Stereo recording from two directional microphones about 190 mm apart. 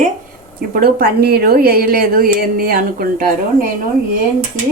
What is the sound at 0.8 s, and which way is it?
Speech, 55° right (ahead or behind).